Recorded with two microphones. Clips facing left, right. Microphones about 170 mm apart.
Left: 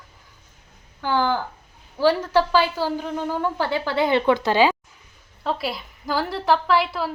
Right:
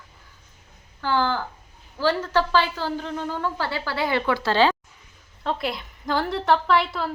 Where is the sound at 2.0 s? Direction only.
10° left (ahead or behind).